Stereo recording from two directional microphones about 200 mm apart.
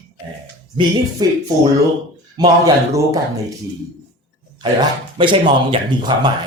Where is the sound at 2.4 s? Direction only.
15° right (ahead or behind).